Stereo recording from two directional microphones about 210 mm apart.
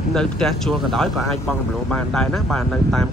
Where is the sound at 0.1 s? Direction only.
5° left (ahead or behind).